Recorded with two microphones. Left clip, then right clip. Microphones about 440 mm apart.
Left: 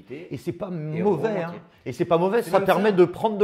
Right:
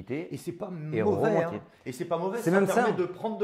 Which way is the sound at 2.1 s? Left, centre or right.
Left.